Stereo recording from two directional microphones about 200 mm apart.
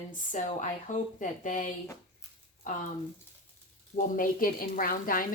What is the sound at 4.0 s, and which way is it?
Speech, 45° left (ahead or behind).